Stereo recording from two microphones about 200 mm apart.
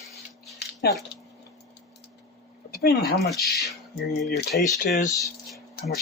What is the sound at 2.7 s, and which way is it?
Speech, 50° left (ahead or behind).